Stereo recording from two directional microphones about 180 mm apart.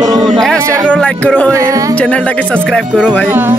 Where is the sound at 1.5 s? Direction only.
20° right (ahead or behind).